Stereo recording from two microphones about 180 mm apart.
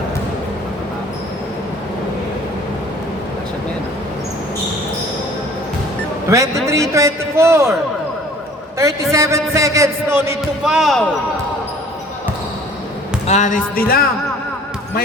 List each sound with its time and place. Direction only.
6.3 s speech: 15° right (ahead or behind)
8.8 s speech: 15° right (ahead or behind)
10.6 s speech: centre (ahead or behind)
13.2 s speech: 40° left (ahead or behind)